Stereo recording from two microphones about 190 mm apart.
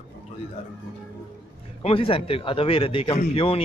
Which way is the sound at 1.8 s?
30° left (ahead or behind).